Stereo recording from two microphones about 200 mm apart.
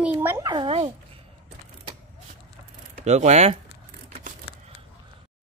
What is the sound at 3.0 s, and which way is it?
Speech, 35° right (ahead or behind).